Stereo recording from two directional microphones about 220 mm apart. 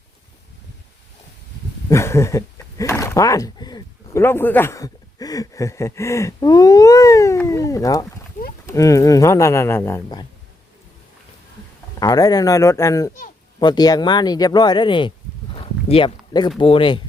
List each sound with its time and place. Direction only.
1.9 s speech: 10° left (ahead or behind)
11.9 s speech: 15° left (ahead or behind)
15.5 s a sound: 25° left (ahead or behind)
16.6 s speech: 20° left (ahead or behind)